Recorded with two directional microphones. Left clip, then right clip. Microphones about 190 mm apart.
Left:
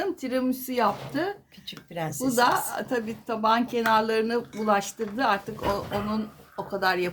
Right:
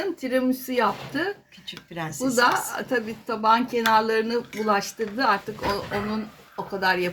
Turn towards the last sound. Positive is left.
turn(degrees=-20)  # may be behind; listen again after turning